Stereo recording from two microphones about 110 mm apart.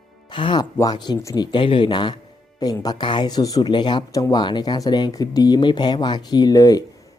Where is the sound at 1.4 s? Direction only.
50° left (ahead or behind); by 6.8 s 35° left (ahead or behind).